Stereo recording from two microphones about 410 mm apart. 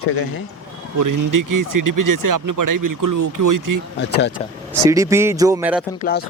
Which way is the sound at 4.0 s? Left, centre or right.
Left.